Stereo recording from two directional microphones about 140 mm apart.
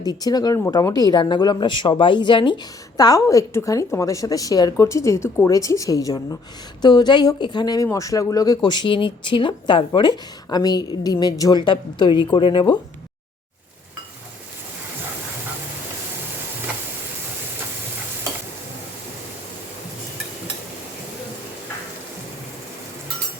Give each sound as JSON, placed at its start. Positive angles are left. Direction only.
{"t": 0.0, "sound": "a woman's voice", "side_deg": 30}